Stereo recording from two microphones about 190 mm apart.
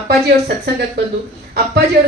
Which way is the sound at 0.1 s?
60° right (ahead or behind).